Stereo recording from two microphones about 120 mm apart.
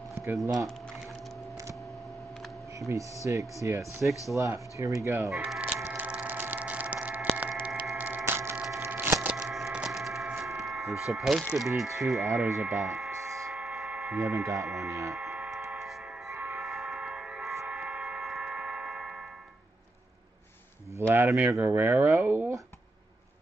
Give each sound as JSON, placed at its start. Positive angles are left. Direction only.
{"t": 2.9, "sound": "speech", "side_deg": -25}
{"t": 5.3, "sound": "speech", "side_deg": -5}
{"t": 5.9, "sound": "a sound", "side_deg": -15}
{"t": 11.5, "sound": "speech", "side_deg": 0}
{"t": 13.1, "sound": "a sound", "side_deg": -25}
{"t": 13.5, "sound": "a sound", "side_deg": 0}
{"t": 14.1, "sound": "speech", "side_deg": -25}
{"t": 14.6, "sound": "speech", "side_deg": 0}
{"t": 14.9, "sound": "speech", "side_deg": -25}
{"t": 15.1, "sound": "tick", "side_deg": -10}
{"t": 16.3, "sound": "train", "side_deg": -15}
{"t": 16.6, "sound": "train", "side_deg": 0}
{"t": 17.6, "sound": "clock", "side_deg": -10}
{"t": 21.1, "sound": "speech", "side_deg": -20}